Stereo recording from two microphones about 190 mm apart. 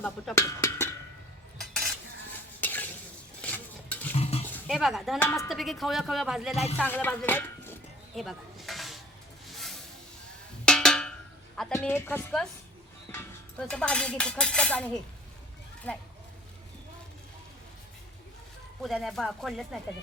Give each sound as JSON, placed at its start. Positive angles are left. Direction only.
{"t": 0.0, "sound": "cowbell", "side_deg": 10}
{"t": 1.5, "sound": "cutlery", "side_deg": 0}
{"t": 2.6, "sound": "stir", "side_deg": 10}
{"t": 4.1, "sound": "a sound", "side_deg": 30}
{"t": 4.4, "sound": "a sound", "side_deg": 5}
{"t": 5.2, "sound": "a woman's voice", "side_deg": 15}
{"t": 5.5, "sound": "speech", "side_deg": 0}
{"t": 6.5, "sound": "speech", "side_deg": 35}
{"t": 6.7, "sound": "speech", "side_deg": 10}
{"t": 8.1, "sound": "snake", "side_deg": 0}
{"t": 10.7, "sound": "percussion", "side_deg": 5}
{"t": 11.7, "sound": "a woman's voice", "side_deg": 10}
{"t": 15.9, "sound": "speech", "side_deg": 5}
{"t": 18.8, "sound": "speech", "side_deg": 0}